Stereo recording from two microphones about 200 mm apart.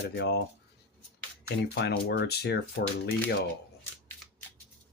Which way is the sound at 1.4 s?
55° left (ahead or behind).